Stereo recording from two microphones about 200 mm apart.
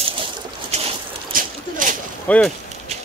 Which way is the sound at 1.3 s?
45° right (ahead or behind).